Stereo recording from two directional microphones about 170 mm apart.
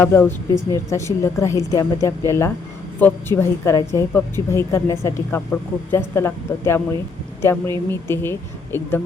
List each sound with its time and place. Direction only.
0.0 s a woman's voice: 15° left (ahead or behind)